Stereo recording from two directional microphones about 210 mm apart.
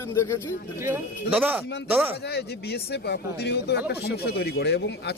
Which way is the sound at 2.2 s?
50° left (ahead or behind).